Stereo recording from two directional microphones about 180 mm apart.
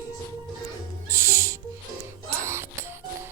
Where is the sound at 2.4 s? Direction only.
15° right (ahead or behind).